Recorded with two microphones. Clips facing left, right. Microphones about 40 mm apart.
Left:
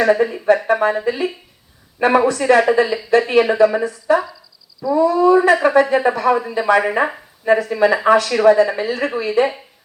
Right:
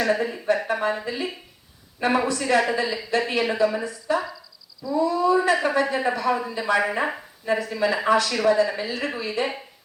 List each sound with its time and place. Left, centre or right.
0.0 s speech: left